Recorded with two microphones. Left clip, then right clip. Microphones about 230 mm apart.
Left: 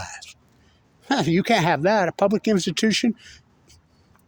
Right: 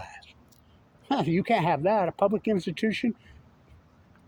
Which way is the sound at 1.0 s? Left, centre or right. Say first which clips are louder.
Left 5 dB; left.